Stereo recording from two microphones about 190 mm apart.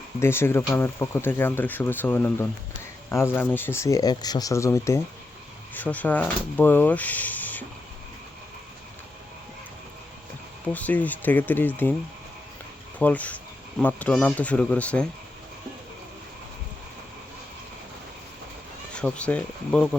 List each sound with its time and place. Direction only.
0.2 s speech: 15° left (ahead or behind)
10.7 s speech: 10° left (ahead or behind)
13.0 s speech: 10° left (ahead or behind)
18.9 s speech: 5° left (ahead or behind)